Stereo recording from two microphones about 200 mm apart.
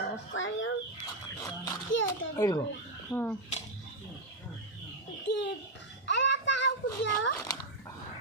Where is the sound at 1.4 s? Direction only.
15° left (ahead or behind).